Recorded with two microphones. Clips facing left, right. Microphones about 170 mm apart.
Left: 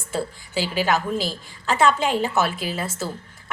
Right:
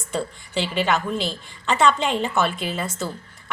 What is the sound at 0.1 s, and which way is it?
A woman's voice, 5° left (ahead or behind).